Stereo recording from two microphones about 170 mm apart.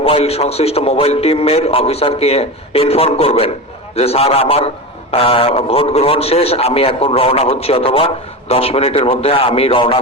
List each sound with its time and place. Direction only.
0.0 s a man's voice: 35° left (ahead or behind)